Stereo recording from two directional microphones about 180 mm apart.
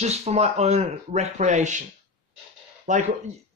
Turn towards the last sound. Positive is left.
turn(degrees=-45)  # may be behind; listen again after turning